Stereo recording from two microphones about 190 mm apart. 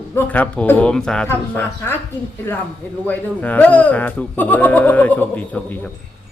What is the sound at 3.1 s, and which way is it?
Speech, 10° left (ahead or behind).